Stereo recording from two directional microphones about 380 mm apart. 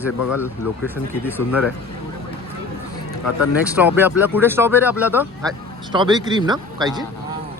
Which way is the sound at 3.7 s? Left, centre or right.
Centre.